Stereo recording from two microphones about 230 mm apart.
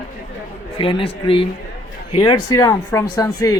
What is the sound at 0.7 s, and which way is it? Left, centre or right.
A man's voice, left.